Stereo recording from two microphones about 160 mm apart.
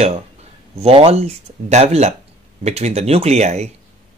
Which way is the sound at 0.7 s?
40° right (ahead or behind).